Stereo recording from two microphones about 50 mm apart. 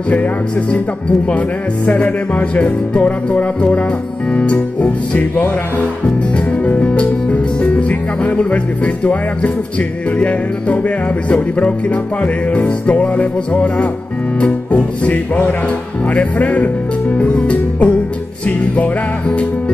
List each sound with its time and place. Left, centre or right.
1.9 s music: left
6.6 s music: left